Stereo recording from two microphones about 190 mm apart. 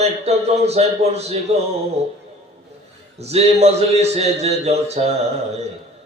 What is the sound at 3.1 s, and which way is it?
A man's voice, 35° right (ahead or behind).